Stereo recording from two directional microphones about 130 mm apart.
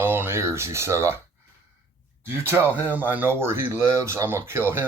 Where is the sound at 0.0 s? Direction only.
15° right (ahead or behind).